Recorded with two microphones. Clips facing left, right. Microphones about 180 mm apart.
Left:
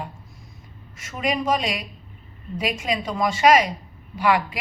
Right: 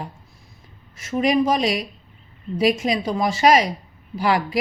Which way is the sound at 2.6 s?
35° right (ahead or behind).